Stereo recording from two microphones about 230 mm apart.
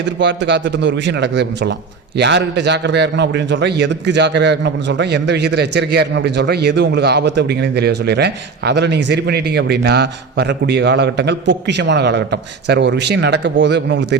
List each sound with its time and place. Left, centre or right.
0.0 s a man's voice: right